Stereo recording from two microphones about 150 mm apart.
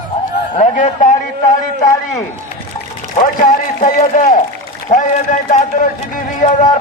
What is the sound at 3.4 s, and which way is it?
Speech, 60° left (ahead or behind).